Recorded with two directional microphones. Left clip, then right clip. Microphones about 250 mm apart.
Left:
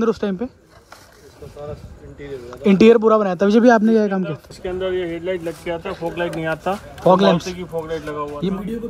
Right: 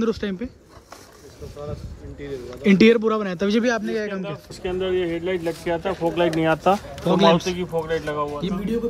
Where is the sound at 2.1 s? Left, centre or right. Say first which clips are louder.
Left 1 dB; centre.